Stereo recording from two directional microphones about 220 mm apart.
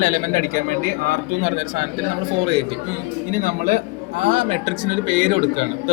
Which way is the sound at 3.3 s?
40° right (ahead or behind).